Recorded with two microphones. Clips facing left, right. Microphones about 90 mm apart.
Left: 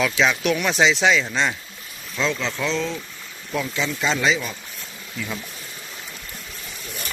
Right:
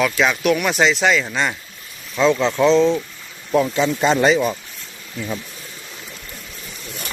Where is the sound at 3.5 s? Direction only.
40° right (ahead or behind).